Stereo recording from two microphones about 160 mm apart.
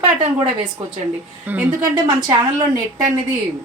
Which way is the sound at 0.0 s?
30° right (ahead or behind).